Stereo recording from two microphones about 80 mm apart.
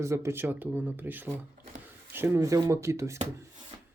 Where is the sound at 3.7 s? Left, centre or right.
Right.